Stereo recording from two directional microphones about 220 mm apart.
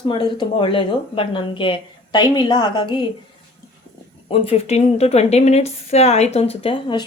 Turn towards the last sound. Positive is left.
turn(degrees=20)  # may be behind; listen again after turning